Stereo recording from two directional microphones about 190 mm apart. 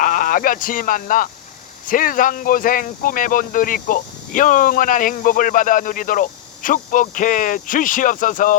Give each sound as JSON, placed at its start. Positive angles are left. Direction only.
{"t": 0.0, "sound": "speech", "side_deg": 45}